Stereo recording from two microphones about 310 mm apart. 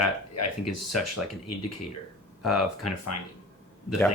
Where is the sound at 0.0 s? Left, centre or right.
Left.